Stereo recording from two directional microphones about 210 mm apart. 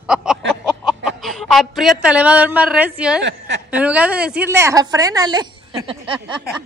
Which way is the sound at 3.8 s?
5° right (ahead or behind).